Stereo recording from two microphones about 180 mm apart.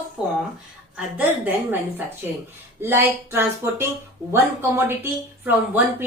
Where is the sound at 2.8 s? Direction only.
10° right (ahead or behind).